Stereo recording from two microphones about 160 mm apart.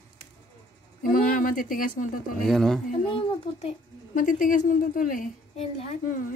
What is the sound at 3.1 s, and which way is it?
Speech, 35° left (ahead or behind).